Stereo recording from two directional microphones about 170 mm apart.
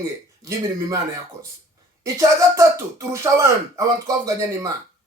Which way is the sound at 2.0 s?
20° right (ahead or behind).